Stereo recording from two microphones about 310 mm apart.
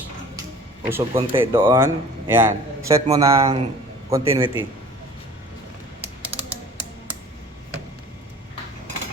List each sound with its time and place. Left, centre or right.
0.9 s a man's voice: centre